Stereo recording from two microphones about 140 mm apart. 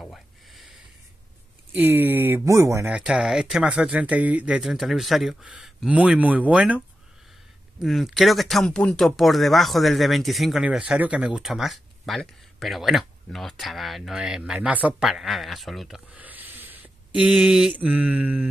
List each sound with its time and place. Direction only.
0.0 s a sound: centre (ahead or behind)
1.7 s speech: 15° right (ahead or behind)
2.9 s speech: 5° right (ahead or behind)
7.8 s speech: centre (ahead or behind)